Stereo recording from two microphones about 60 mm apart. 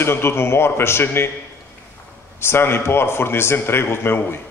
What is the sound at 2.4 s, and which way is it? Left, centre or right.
A man's voice, left.